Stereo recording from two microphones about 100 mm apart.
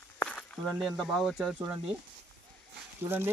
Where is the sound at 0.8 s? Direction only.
Centre (ahead or behind).